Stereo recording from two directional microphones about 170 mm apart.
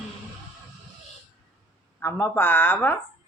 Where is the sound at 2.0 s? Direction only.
10° left (ahead or behind).